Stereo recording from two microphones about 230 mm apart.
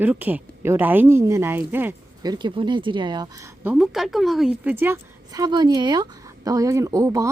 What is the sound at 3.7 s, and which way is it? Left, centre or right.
A woman's voice, centre.